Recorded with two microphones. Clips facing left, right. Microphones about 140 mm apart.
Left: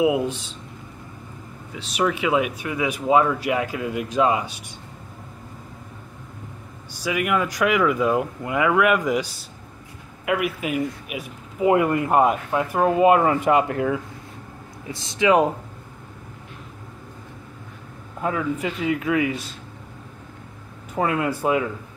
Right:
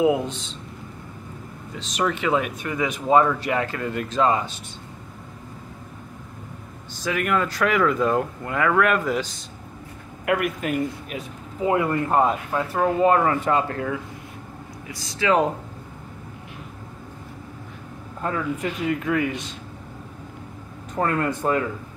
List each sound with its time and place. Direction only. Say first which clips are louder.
0.0 s speech: even; 10° left (ahead or behind)
1.7 s speech: left 2 dB; 5° left (ahead or behind)
6.9 s speech: left 1 dB; 10° left (ahead or behind)
18.2 s speech: left 2 dB; 10° left (ahead or behind)
20.9 s speech: left 1 dB; 10° left (ahead or behind)